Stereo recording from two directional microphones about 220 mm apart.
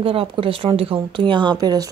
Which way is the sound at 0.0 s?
25° right (ahead or behind).